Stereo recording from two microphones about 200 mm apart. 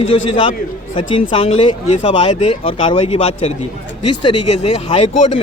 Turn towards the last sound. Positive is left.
turn(degrees=30)  # may be behind; listen again after turning